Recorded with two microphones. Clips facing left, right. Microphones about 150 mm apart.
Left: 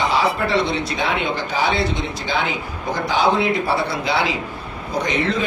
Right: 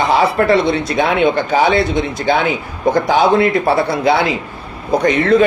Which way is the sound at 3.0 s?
55° right (ahead or behind).